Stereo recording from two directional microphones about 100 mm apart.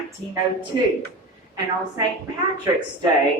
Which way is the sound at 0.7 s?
50° right (ahead or behind).